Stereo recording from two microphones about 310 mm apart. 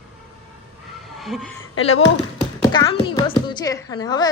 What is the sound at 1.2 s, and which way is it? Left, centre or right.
Speech, centre.